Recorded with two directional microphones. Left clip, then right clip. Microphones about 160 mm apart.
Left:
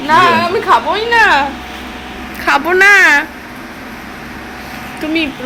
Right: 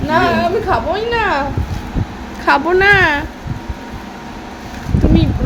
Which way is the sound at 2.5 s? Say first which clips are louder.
Left 3 dB; 25° right (ahead or behind).